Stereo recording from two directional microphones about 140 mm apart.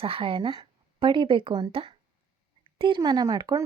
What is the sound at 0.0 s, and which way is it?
Speech, 40° right (ahead or behind).